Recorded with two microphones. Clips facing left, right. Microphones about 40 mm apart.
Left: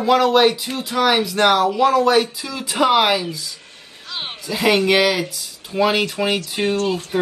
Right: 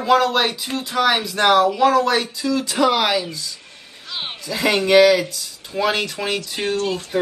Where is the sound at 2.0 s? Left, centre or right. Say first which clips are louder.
Left 3 dB; centre.